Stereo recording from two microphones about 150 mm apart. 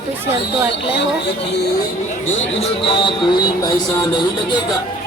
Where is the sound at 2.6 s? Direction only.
35° left (ahead or behind).